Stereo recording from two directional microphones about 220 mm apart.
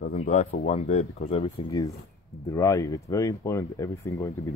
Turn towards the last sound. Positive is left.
turn(degrees=15)  # may be behind; listen again after turning